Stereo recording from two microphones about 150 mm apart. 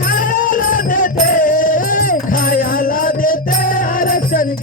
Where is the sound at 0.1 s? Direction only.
65° left (ahead or behind).